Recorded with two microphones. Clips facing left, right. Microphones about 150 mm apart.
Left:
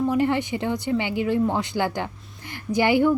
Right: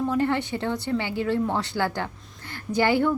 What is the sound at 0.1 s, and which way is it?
Speech, 15° left (ahead or behind).